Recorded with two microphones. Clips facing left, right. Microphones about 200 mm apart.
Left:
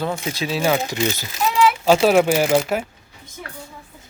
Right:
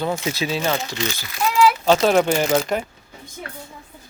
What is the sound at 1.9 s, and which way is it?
Speech, 5° left (ahead or behind).